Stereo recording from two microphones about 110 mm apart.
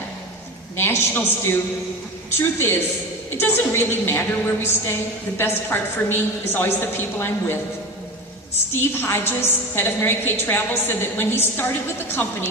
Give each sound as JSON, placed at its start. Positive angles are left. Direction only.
{"t": 0.8, "sound": "a woman's voice", "side_deg": 20}
{"t": 9.0, "sound": "a woman's voice", "side_deg": 20}